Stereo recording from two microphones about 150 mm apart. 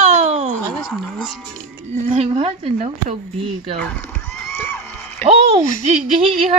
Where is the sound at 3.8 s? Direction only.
15° left (ahead or behind).